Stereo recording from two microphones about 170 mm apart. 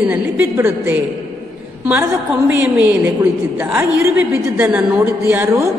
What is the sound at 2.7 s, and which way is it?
A woman's voice, 10° right (ahead or behind).